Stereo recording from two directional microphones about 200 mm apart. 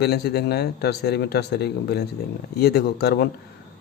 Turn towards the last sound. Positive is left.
turn(degrees=55)  # may be behind; listen again after turning